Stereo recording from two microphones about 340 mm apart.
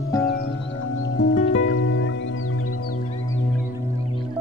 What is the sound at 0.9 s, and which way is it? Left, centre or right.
Music, left.